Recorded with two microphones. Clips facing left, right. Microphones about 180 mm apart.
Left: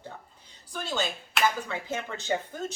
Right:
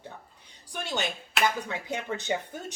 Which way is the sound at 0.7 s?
20° right (ahead or behind).